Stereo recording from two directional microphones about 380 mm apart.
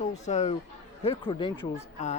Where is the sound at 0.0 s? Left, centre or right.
Centre.